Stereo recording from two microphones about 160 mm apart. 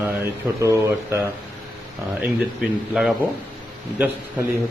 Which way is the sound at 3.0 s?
5° right (ahead or behind).